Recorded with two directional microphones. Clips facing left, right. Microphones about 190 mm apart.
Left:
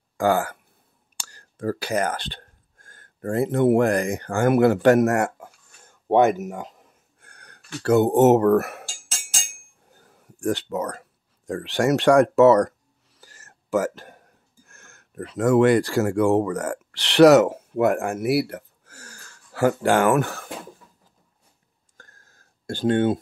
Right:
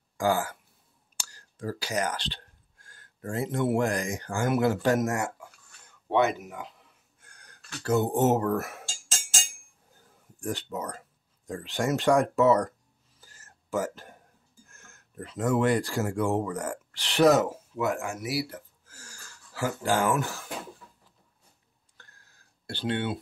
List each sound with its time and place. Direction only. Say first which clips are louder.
0.2 s speech: left 5 dB; 60° left (ahead or behind)
5.9 s a sound: left 7 dB; 45° left (ahead or behind); by 8.8 s 65° left (ahead or behind)
9.8 s speech: left 5 dB; 75° left (ahead or behind)
13.2 s whispering: left 5 dB; 75° left (ahead or behind)
14.7 s speech: left 4 dB; 75° left (ahead or behind)
21.9 s a sound: left 6 dB; 45° left (ahead or behind)